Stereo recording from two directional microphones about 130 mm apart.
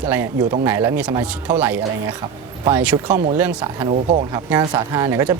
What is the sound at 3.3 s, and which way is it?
Speech, 10° right (ahead or behind).